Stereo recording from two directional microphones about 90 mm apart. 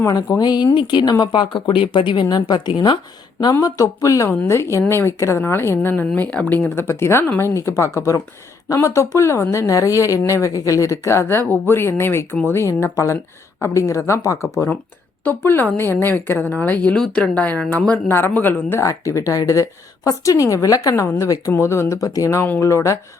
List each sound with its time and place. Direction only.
0.0 s speech: 45° left (ahead or behind)
3.6 s a woman's voice: 40° left (ahead or behind); by 18.8 s 20° left (ahead or behind)
18.8 s speech: 35° left (ahead or behind)